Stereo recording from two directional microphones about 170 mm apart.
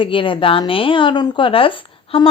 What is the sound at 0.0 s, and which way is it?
A woman's voice, 30° left (ahead or behind).